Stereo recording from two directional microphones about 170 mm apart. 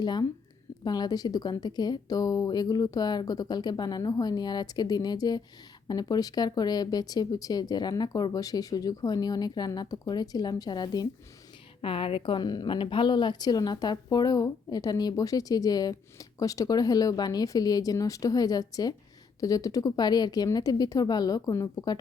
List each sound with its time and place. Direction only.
0.0 s a woman's voice: 25° left (ahead or behind)